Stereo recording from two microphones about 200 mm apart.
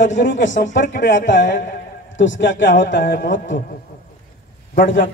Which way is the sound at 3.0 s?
45° left (ahead or behind).